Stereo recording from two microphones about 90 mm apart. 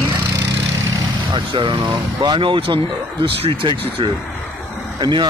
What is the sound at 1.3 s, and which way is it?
Speech, 60° right (ahead or behind).